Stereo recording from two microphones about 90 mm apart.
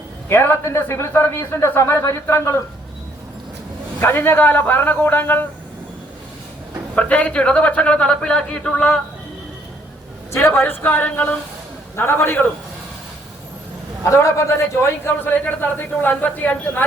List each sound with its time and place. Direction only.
0.3 s a man's voice: 25° left (ahead or behind)
4.0 s a man's voice: 25° left (ahead or behind)
6.9 s a man's voice: 15° left (ahead or behind)
10.3 s a man's voice: 25° left (ahead or behind)
11.9 s a man's voice: 25° left (ahead or behind)
14.0 s a man's voice: 35° left (ahead or behind); by 16.8 s 15° left (ahead or behind)